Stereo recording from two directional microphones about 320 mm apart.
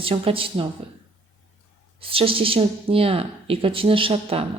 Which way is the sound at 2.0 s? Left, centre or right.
Centre.